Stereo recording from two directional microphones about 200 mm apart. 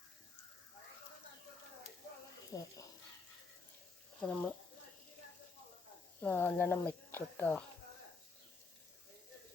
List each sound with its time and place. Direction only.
2.5 s a sound: 20° left (ahead or behind)
4.2 s speech: 5° left (ahead or behind)
6.2 s speech: 10° left (ahead or behind)